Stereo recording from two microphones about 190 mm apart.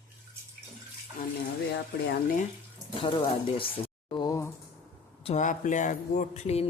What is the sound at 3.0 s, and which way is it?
Speech, 25° left (ahead or behind).